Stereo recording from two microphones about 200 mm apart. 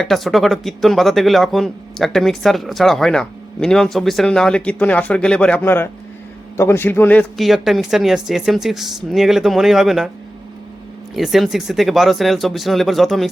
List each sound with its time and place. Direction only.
0.0 s speech: centre (ahead or behind)
11.1 s speech: centre (ahead or behind)